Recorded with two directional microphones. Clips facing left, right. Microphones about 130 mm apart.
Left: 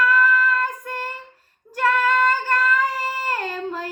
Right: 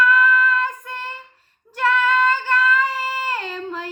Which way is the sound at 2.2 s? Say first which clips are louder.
Right 1 dB; 40° left (ahead or behind).